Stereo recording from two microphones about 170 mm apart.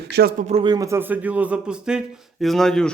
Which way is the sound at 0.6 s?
20° right (ahead or behind).